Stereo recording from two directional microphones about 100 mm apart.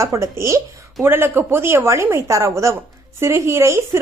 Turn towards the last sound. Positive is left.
turn(degrees=-30)  # may be behind; listen again after turning